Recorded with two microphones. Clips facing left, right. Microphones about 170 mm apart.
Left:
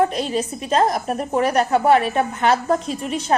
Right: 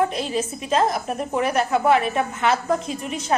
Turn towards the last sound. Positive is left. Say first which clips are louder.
# left 3 dB
turn(degrees=35)  # may be behind; listen again after turning